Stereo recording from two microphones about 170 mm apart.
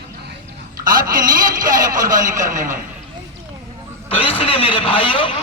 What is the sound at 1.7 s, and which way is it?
A man's voice, 55° right (ahead or behind).